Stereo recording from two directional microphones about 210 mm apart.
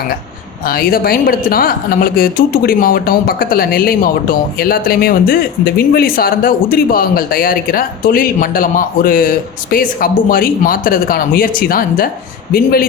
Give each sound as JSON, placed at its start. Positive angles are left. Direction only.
{"t": 0.6, "sound": "speech", "side_deg": 45}